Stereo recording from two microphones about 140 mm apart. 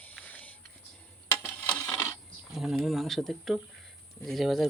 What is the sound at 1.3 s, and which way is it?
Coin, 15° left (ahead or behind).